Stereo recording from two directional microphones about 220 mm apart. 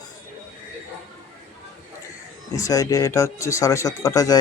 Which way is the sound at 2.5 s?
15° left (ahead or behind).